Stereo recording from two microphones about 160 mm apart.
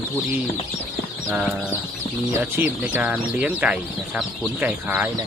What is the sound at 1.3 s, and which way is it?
Speech, 5° right (ahead or behind).